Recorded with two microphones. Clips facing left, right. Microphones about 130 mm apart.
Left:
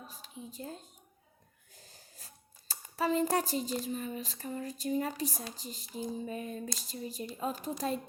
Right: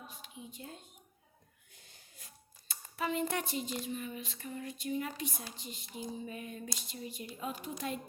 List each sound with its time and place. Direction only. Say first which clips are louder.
0.1 s speech: left 2 dB; 40° left (ahead or behind)
1.7 s a sound: left 5 dB; 40° left (ahead or behind)
3.8 s speech: left 3 dB; 40° left (ahead or behind)